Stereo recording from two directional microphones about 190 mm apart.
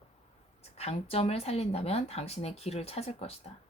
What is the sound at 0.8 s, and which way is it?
Speech, 35° left (ahead or behind).